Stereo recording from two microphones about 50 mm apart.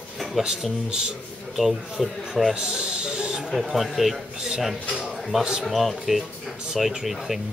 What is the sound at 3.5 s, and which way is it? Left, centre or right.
Speech, centre.